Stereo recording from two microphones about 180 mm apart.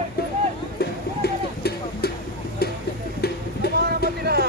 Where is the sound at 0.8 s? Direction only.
60° left (ahead or behind).